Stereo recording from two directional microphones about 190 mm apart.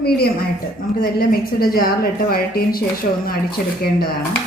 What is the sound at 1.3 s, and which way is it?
Speech, 50° left (ahead or behind).